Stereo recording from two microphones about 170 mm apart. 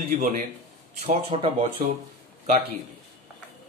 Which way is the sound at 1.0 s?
35° right (ahead or behind).